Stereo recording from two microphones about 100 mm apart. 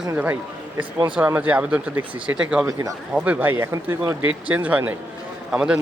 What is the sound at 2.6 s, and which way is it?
Speech, 35° right (ahead or behind).